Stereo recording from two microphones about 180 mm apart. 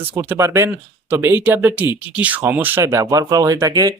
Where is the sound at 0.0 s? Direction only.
10° right (ahead or behind).